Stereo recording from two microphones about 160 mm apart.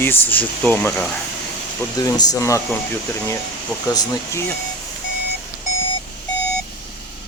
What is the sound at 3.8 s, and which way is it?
Speech, 20° left (ahead or behind).